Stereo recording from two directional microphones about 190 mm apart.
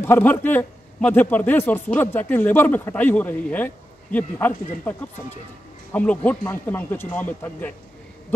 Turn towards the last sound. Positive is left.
turn(degrees=10)  # may be behind; listen again after turning